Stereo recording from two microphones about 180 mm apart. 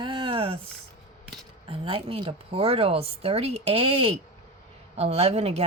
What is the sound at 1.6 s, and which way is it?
A woman's voice, 30° right (ahead or behind).